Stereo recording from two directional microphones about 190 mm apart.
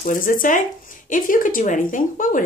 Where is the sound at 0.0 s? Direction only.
45° left (ahead or behind).